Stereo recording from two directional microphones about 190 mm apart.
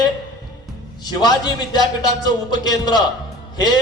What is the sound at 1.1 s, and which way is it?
A man's voice, 20° left (ahead or behind).